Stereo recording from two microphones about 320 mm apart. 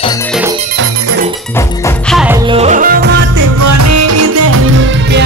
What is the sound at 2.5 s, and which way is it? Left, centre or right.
Music, centre.